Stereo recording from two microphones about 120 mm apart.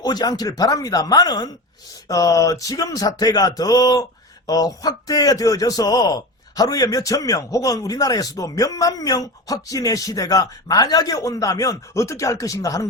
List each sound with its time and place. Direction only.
0.0 s a man's voice: 35° left (ahead or behind)